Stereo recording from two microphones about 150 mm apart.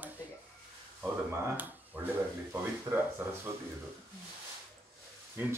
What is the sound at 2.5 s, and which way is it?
A man's voice, 15° right (ahead or behind).